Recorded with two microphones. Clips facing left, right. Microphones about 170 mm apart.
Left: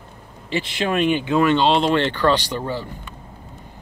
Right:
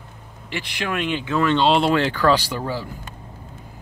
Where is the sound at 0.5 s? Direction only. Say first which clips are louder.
Left 5 dB; 20° left (ahead or behind).